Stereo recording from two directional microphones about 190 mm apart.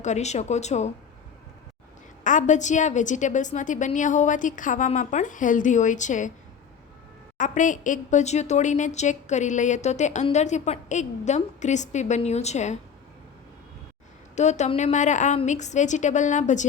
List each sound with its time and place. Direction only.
0.0 s a woman's voice: 35° left (ahead or behind)
2.2 s a woman's voice: 40° left (ahead or behind)
7.3 s a woman's voice: 40° left (ahead or behind)
14.3 s a woman's voice: 35° left (ahead or behind)